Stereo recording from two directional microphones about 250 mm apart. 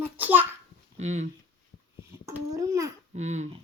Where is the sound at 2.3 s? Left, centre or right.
Centre.